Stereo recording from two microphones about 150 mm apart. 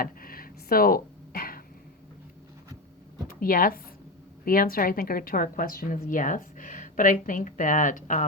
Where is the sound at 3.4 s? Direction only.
70° left (ahead or behind).